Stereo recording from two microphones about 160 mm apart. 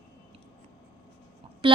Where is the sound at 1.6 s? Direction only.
35° right (ahead or behind).